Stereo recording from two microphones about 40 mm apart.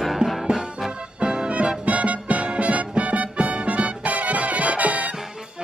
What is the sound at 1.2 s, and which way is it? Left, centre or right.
Music, right.